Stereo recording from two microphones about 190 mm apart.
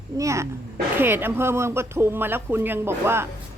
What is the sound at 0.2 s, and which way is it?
A woman's voice, 15° right (ahead or behind).